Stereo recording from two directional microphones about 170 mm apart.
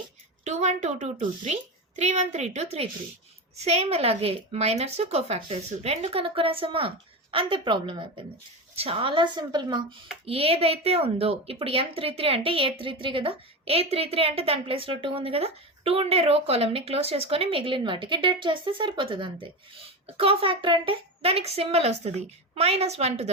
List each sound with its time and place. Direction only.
0.4 s a woman's voice: 40° right (ahead or behind)